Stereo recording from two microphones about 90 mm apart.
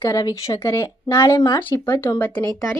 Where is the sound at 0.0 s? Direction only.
35° left (ahead or behind).